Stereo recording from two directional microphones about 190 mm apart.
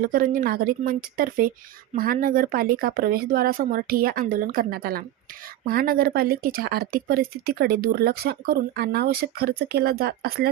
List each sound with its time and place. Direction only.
0.0 s speech: 50° right (ahead or behind)